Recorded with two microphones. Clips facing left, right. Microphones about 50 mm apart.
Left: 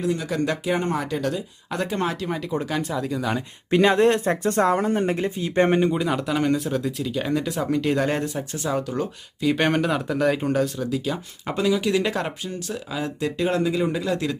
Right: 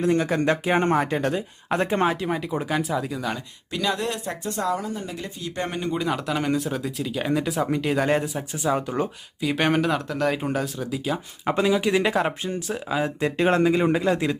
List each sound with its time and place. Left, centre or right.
0.0 s speech: right
2.2 s speech: centre
3.7 s speech: left
5.2 s speech: left
5.9 s speech: centre; by 9.0 s right
9.4 s speech: centre
11.4 s speech: right